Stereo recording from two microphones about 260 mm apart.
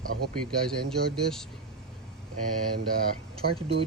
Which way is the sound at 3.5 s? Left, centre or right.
Right.